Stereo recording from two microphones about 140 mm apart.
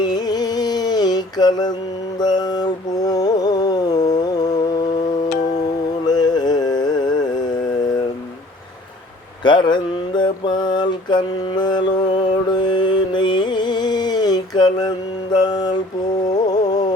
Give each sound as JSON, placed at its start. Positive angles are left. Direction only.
{"t": 0.0, "sound": "mantra", "side_deg": 30}
{"t": 6.1, "sound": "music", "side_deg": 30}
{"t": 9.4, "sound": "mantra", "side_deg": 35}
{"t": 16.5, "sound": "carnatic music", "side_deg": 30}